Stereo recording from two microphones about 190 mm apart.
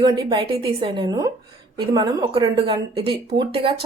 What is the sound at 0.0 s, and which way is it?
Speech, 25° right (ahead or behind).